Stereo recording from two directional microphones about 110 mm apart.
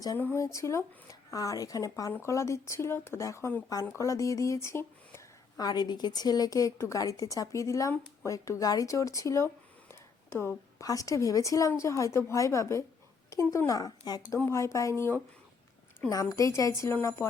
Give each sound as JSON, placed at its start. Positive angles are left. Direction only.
{"t": 0.3, "sound": "a woman's voice", "side_deg": 25}
{"t": 5.5, "sound": "a woman's voice", "side_deg": 40}
{"t": 9.9, "sound": "a sound", "side_deg": 20}
{"t": 10.8, "sound": "a woman's voice", "side_deg": 30}